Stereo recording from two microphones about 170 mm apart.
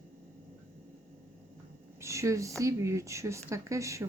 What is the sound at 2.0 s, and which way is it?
Speech, 15° right (ahead or behind).